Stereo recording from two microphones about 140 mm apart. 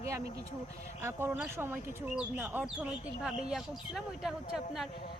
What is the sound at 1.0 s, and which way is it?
Speech, 15° right (ahead or behind).